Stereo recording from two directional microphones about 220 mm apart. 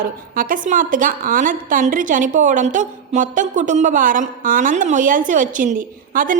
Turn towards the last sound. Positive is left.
turn(degrees=-35)  # may be behind; listen again after turning